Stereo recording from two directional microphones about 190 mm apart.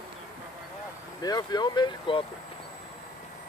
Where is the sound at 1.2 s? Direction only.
20° left (ahead or behind).